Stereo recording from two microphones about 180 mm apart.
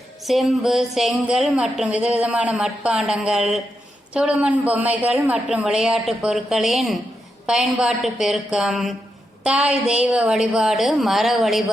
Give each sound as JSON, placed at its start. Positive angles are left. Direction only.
{"t": 0.3, "sound": "speech", "side_deg": 0}